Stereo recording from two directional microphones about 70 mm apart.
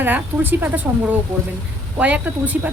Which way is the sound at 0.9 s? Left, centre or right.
Centre.